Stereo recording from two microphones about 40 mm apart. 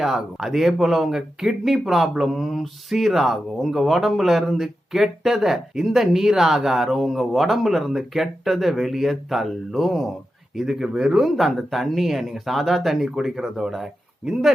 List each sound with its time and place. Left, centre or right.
0.0 s speech: centre
10.8 s speech: centre
11.2 s speech: centre